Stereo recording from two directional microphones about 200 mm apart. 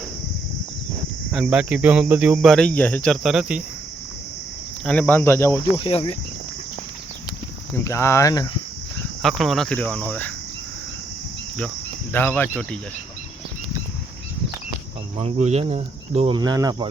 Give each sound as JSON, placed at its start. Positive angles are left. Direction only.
{"t": 1.3, "sound": "speech", "side_deg": -5}
{"t": 4.9, "sound": "speech", "side_deg": 10}
{"t": 7.9, "sound": "speech", "side_deg": 15}
{"t": 9.2, "sound": "speech", "side_deg": 0}
{"t": 12.1, "sound": "speech", "side_deg": 10}
{"t": 15.2, "sound": "speech", "side_deg": -35}